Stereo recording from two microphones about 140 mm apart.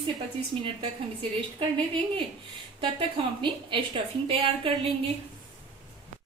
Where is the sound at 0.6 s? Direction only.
40° right (ahead or behind).